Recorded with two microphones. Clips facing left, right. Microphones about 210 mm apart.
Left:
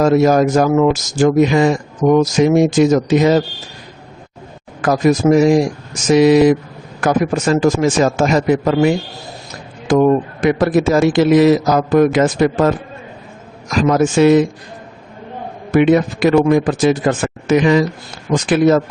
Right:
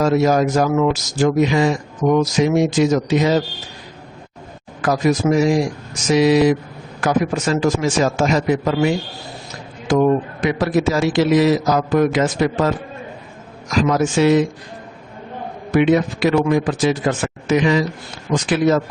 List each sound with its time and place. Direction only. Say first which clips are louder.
0.0 s speech: left 4 dB; 50° left (ahead or behind)
4.8 s speech: left 4 dB; 50° left (ahead or behind)
10.4 s speech: left 5 dB; 50° left (ahead or behind)
13.8 s speech: left 5 dB; 50° left (ahead or behind)
15.7 s speech: left 3 dB; 50° left (ahead or behind)